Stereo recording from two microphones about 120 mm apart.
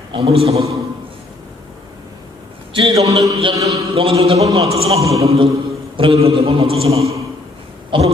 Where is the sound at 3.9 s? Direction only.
50° right (ahead or behind).